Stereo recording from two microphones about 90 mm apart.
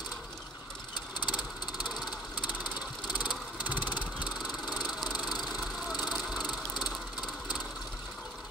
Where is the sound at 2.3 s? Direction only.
55° left (ahead or behind).